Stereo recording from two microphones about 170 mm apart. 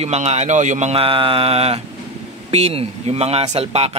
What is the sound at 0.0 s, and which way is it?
Speech, 40° right (ahead or behind).